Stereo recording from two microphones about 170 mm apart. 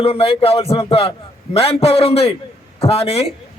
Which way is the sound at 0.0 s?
35° left (ahead or behind).